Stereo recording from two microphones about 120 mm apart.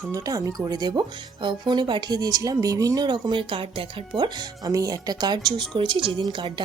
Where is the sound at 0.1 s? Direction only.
30° right (ahead or behind).